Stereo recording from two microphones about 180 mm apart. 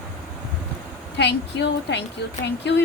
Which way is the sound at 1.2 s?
70° left (ahead or behind).